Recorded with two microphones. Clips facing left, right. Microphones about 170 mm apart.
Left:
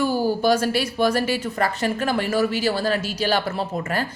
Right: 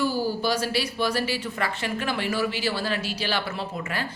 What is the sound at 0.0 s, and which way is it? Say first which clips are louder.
Speech: left 5 dB; 50° left (ahead or behind).